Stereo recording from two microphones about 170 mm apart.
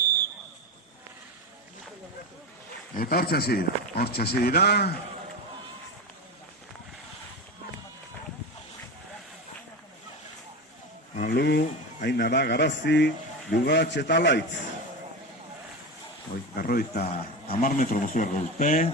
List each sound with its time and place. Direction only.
2.9 s speech: 60° left (ahead or behind)
11.2 s a sound: 70° left (ahead or behind)
12.0 s speech: 75° left (ahead or behind)
16.3 s speech: 60° left (ahead or behind)